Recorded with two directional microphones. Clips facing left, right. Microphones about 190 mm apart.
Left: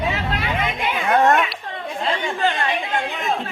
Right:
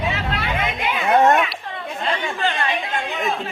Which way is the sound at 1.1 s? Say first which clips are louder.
Right 1 dB; 20° right (ahead or behind).